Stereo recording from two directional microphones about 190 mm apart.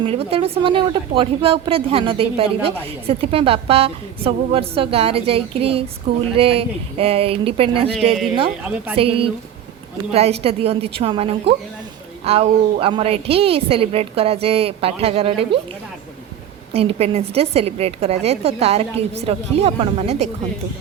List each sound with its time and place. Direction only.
0.0 s a woman's voice: 30° right (ahead or behind)
9.0 s a woman's voice: 30° right (ahead or behind)
16.7 s a woman's voice: 30° right (ahead or behind)